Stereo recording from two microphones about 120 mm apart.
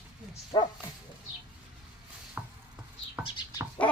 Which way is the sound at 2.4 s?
15° right (ahead or behind).